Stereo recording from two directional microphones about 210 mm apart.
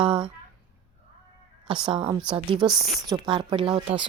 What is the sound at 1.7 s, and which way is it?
Speech, 25° right (ahead or behind).